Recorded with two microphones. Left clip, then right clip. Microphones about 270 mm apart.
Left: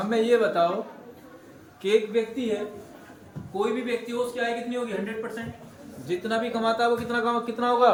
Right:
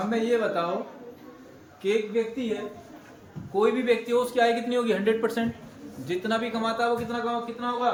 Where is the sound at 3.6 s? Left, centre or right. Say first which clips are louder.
Right 4 dB; centre.